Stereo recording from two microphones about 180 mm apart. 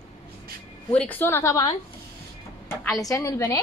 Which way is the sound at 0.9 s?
10° left (ahead or behind).